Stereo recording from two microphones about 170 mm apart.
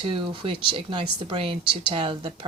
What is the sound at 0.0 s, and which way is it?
Speech, 30° right (ahead or behind).